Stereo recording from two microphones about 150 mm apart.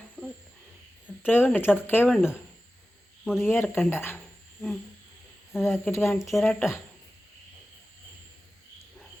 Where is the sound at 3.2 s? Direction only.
5° right (ahead or behind).